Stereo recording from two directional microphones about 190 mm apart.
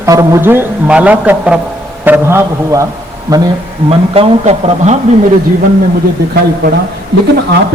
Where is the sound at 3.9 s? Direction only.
30° right (ahead or behind).